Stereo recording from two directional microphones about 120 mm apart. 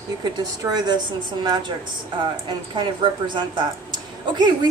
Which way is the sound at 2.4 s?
40° right (ahead or behind).